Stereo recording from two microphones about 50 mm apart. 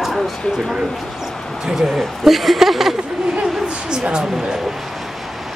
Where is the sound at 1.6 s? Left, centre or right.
Centre.